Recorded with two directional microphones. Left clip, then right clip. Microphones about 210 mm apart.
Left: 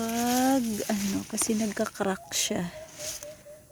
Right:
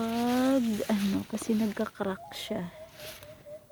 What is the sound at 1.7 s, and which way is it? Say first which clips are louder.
Speech: left 4 dB; centre (ahead or behind).